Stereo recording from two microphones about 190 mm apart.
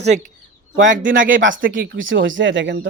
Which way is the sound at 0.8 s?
75° right (ahead or behind).